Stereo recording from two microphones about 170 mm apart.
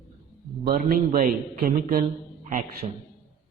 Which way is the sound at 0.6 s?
60° right (ahead or behind).